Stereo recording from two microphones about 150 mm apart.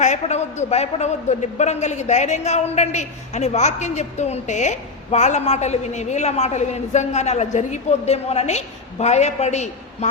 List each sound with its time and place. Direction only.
0.0 s a man's voice: 50° left (ahead or behind)